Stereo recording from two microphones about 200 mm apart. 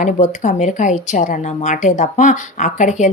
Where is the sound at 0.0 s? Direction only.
35° left (ahead or behind).